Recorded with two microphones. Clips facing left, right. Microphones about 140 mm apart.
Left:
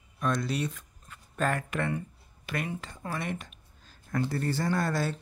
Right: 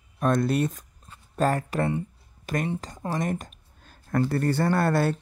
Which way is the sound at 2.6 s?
35° right (ahead or behind).